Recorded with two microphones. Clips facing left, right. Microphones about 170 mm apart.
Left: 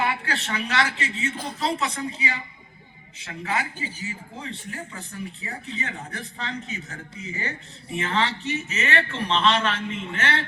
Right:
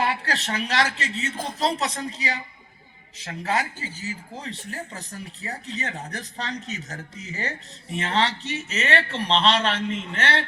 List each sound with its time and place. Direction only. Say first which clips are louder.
0.0 s speech: right 1 dB; 35° right (ahead or behind)